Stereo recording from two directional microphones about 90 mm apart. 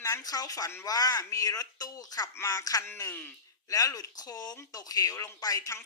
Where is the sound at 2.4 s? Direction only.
35° left (ahead or behind).